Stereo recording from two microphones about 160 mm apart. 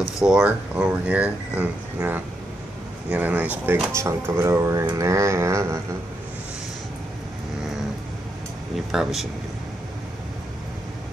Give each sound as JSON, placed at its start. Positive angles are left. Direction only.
{"t": 0.0, "sound": "speech", "side_deg": -5}
{"t": 8.7, "sound": "speech", "side_deg": 0}